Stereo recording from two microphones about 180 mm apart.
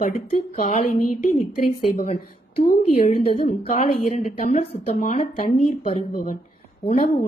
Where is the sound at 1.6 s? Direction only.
45° left (ahead or behind).